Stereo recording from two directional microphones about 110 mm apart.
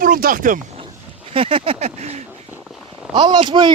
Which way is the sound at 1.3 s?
60° right (ahead or behind).